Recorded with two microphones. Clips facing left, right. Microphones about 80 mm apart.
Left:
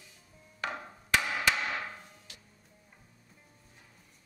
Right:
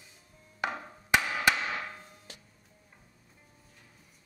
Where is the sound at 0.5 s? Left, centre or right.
Centre.